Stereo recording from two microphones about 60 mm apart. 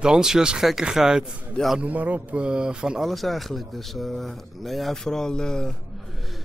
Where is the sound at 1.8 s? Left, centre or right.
Right.